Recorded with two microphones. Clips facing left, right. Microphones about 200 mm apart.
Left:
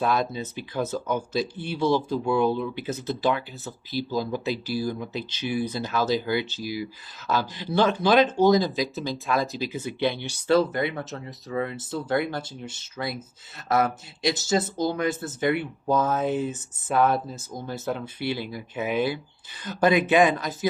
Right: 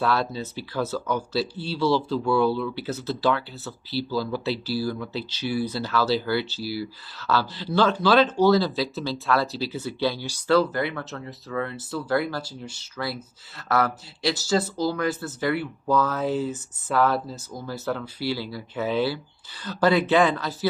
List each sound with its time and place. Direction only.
0.0 s speech: 20° left (ahead or behind)